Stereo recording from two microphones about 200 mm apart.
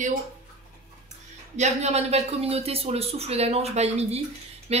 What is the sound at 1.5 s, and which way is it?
A woman's voice, 35° right (ahead or behind).